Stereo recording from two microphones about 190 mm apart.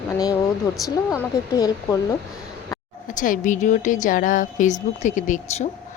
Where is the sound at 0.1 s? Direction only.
15° left (ahead or behind).